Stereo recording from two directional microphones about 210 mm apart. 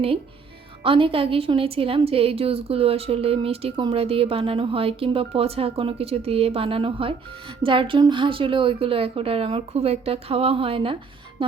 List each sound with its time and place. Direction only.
0.9 s a woman's voice: 25° right (ahead or behind)